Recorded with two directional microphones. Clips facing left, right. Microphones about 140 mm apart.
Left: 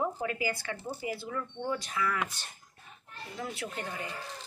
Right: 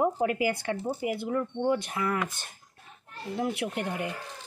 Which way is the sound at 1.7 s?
55° right (ahead or behind).